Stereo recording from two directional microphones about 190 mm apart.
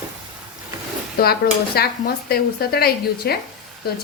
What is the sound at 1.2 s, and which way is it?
A woman's voice, 55° left (ahead or behind).